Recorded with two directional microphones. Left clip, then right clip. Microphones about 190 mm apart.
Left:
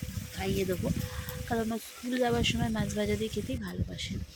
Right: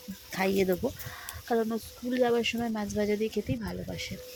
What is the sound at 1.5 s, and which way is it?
Speech, 5° right (ahead or behind).